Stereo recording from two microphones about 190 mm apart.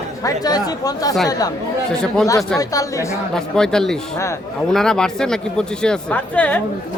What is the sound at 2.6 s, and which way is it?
Speech, 15° left (ahead or behind).